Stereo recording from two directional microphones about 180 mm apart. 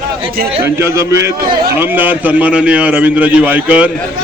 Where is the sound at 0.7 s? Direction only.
15° right (ahead or behind).